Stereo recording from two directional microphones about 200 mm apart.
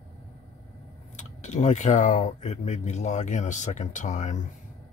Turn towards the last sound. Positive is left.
turn(degrees=35)  # may be behind; listen again after turning